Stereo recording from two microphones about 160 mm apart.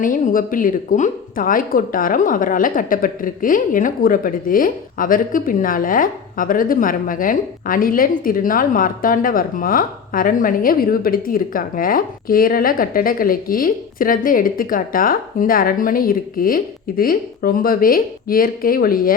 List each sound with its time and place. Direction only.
0.0 s a woman's voice: 55° left (ahead or behind)